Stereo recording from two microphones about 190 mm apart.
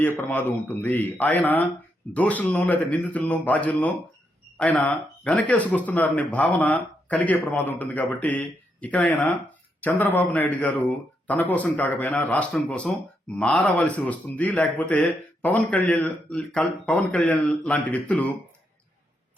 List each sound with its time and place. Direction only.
0.0 s speech: 10° left (ahead or behind)